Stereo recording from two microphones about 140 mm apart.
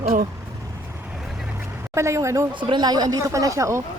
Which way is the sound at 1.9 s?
20° right (ahead or behind).